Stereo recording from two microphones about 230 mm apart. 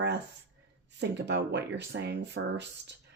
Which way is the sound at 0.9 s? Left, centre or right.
Right.